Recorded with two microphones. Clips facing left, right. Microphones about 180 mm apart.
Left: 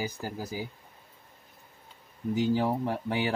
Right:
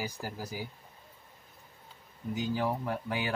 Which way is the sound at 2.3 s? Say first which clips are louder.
Left 5 dB; 25° left (ahead or behind).